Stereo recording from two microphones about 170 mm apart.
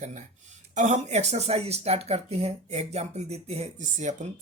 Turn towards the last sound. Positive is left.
turn(degrees=-45)  # may be behind; listen again after turning